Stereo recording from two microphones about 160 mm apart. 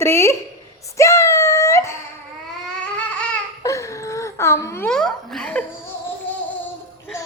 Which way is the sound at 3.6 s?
20° left (ahead or behind).